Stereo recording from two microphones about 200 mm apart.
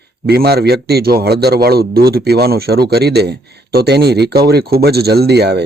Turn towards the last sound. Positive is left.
turn(degrees=-55)  # may be behind; listen again after turning